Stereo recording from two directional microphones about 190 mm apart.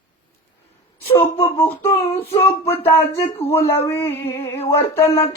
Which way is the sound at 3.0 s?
30° left (ahead or behind).